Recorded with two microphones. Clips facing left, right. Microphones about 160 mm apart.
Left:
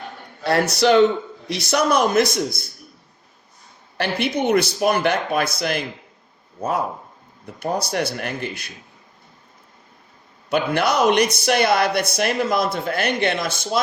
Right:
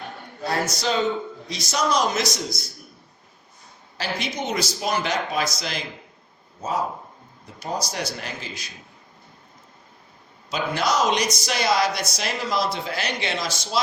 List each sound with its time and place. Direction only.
0.4 s a man's voice: 65° left (ahead or behind)
3.9 s speech: 60° left (ahead or behind)
10.5 s speech: 60° left (ahead or behind)